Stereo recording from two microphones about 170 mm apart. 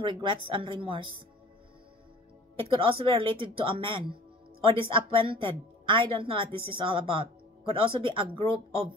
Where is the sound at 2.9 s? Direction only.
30° right (ahead or behind).